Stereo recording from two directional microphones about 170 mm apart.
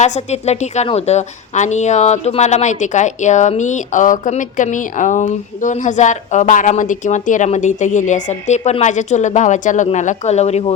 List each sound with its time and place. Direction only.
0.0 s a woman's voice: 40° left (ahead or behind)